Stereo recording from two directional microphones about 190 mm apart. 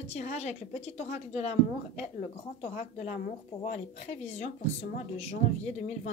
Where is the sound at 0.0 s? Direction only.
35° left (ahead or behind).